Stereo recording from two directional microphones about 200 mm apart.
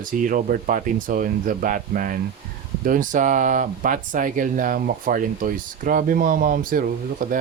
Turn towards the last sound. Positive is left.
turn(degrees=-45)  # may be behind; listen again after turning